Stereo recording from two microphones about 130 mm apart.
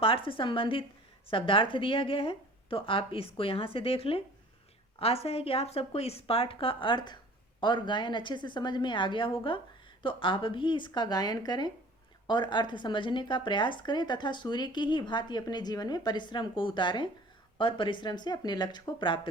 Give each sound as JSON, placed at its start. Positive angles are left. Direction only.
{"t": 0.0, "sound": "a woman's voice", "side_deg": 45}